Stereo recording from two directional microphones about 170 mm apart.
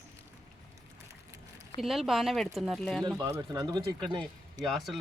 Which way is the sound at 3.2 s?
20° right (ahead or behind).